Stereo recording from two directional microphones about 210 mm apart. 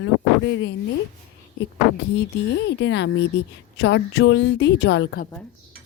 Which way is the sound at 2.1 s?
55° left (ahead or behind).